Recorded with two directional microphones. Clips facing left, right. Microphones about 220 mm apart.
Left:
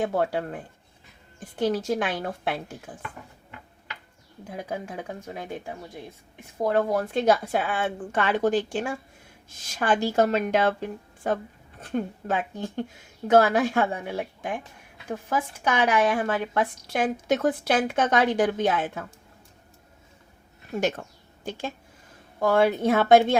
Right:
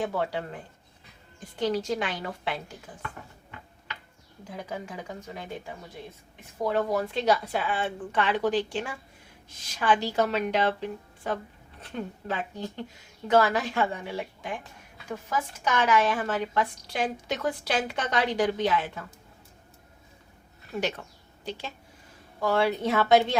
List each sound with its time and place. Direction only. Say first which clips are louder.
0.2 s a woman's voice: left 4 dB; 50° left (ahead or behind)
1.5 s a woman's voice: left 3 dB; 50° left (ahead or behind)
4.4 s a woman's voice: left 3 dB; 50° left (ahead or behind)
6.7 s a woman's voice: left 3 dB; 50° left (ahead or behind)
20.7 s a woman's voice: left 4 dB; 45° left (ahead or behind)